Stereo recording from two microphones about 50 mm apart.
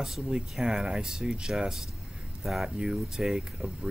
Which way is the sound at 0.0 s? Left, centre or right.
Centre.